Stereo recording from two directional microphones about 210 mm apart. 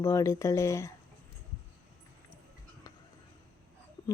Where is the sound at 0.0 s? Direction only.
15° left (ahead or behind).